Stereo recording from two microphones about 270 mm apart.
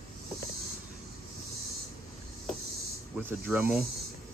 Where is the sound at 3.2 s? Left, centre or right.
Centre.